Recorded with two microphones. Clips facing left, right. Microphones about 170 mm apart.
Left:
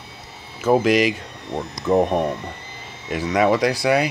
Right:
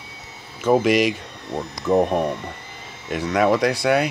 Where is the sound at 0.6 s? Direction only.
Centre (ahead or behind).